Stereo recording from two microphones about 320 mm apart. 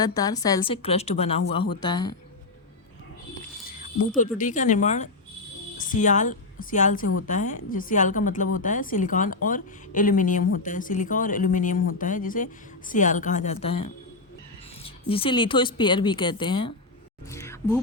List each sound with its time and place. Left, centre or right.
0.0 s speech: centre
4.4 s a woman's voice: left; by 17.7 s centre